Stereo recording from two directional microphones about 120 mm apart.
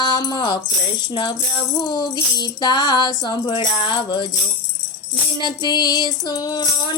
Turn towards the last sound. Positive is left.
turn(degrees=35)  # may be behind; listen again after turning